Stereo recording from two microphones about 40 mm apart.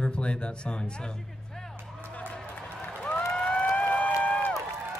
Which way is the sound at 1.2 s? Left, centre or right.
Centre.